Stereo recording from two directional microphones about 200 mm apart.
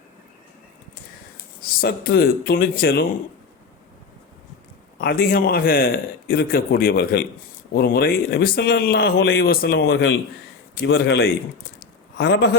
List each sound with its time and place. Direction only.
1.8 s a man's voice: 50° left (ahead or behind)
4.9 s a man's voice: 50° left (ahead or behind)